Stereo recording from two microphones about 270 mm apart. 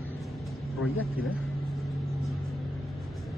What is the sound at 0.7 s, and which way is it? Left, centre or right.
Speech, left.